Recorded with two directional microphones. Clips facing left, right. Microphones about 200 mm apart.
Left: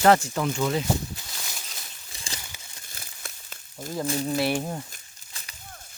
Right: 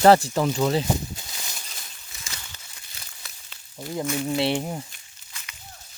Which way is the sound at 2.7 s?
50° left (ahead or behind).